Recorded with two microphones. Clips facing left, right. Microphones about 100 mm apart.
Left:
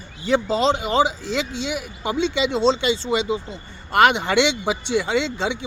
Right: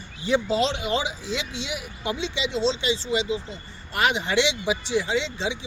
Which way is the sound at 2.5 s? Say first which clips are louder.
Left 3 dB; 50° left (ahead or behind).